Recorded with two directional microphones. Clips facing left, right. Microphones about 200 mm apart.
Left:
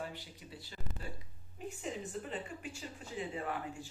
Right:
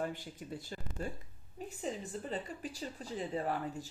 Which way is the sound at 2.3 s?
35° right (ahead or behind).